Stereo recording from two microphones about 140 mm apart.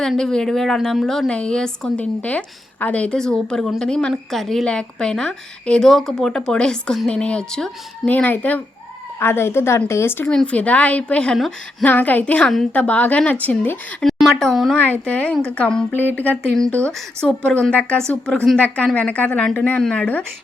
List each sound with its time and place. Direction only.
0.0 s a woman's voice: 5° left (ahead or behind)
14.8 s a woman's voice: 10° left (ahead or behind)